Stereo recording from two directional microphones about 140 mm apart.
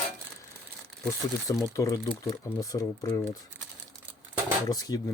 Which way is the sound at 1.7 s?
25° left (ahead or behind).